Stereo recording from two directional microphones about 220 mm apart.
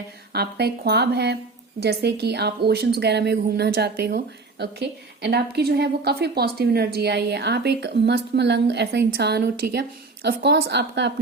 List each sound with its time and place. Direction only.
0.3 s a woman's voice: 50° right (ahead or behind)